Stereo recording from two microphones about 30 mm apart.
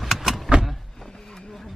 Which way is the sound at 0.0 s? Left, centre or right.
Centre.